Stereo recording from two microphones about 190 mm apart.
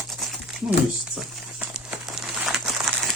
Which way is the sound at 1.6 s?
5° right (ahead or behind).